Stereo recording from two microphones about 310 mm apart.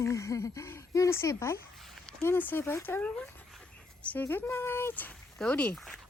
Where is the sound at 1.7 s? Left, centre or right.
Centre.